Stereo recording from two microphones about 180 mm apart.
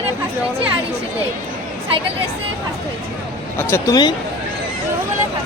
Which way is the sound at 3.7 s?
20° left (ahead or behind).